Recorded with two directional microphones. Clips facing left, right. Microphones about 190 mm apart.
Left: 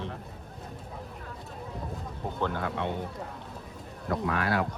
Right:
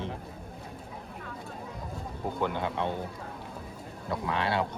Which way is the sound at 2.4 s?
20° right (ahead or behind).